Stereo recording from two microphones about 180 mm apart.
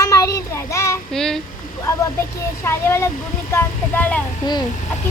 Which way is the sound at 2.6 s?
15° left (ahead or behind).